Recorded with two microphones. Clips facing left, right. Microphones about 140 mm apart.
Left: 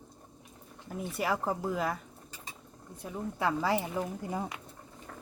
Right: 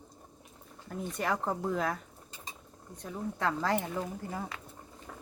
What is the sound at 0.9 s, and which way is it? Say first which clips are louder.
Speech: left 1 dB; 5° left (ahead or behind).